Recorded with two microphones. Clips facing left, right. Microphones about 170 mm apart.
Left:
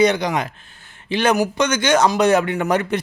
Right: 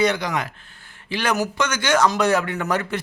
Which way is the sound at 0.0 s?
20° left (ahead or behind).